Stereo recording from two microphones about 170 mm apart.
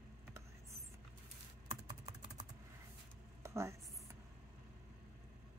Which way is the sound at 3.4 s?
15° right (ahead or behind).